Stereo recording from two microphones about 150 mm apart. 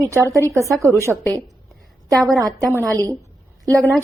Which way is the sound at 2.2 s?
20° right (ahead or behind).